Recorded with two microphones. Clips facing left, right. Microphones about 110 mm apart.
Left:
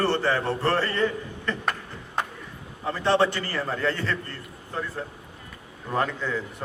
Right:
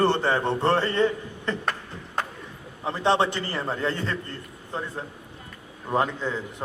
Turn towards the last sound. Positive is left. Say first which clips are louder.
# right 1 dB
turn(degrees=-20)  # may be behind; listen again after turning